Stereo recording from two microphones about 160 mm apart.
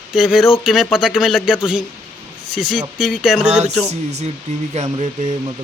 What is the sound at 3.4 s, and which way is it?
Speech, 45° right (ahead or behind).